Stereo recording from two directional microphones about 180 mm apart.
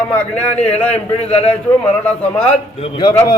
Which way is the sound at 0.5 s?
35° left (ahead or behind).